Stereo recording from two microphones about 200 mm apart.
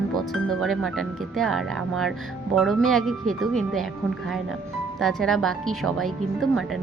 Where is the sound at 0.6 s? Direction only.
Centre (ahead or behind).